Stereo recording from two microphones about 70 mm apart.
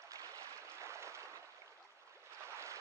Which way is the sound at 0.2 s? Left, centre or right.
Right.